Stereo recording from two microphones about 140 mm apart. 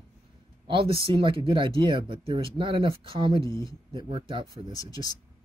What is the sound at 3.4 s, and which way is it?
Speech, 25° left (ahead or behind).